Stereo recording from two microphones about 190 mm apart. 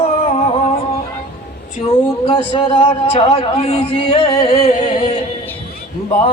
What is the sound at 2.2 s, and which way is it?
A man's voice, 30° left (ahead or behind).